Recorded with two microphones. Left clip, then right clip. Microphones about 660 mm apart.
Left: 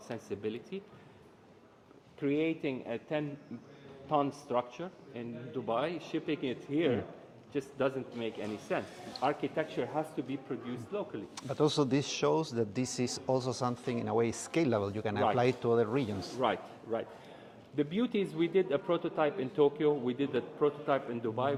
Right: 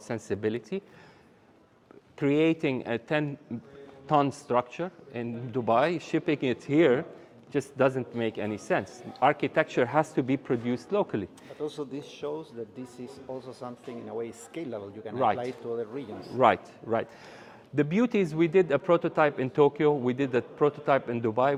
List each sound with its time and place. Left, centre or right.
0.1 s a man's voice: right
2.1 s a man's voice: right
11.6 s speech: left
16.4 s a man's voice: right